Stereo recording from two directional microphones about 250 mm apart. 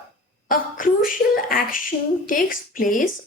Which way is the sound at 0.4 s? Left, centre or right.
Left.